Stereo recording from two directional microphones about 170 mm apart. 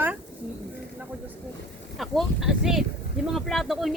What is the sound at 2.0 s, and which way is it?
Speech, centre (ahead or behind).